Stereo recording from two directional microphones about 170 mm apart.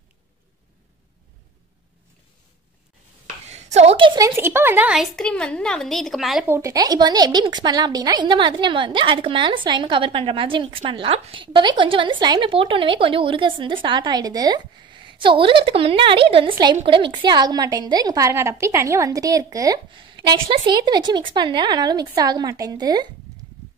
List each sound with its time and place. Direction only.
3.4 s a sound: 40° right (ahead or behind)
4.4 s a woman's voice: 15° right (ahead or behind)
6.4 s a woman's voice: 15° right (ahead or behind)